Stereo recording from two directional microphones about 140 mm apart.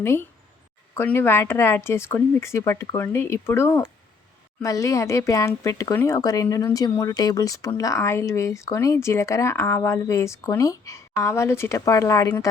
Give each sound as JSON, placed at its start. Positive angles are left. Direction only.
{"t": 0.0, "sound": "speech", "side_deg": 15}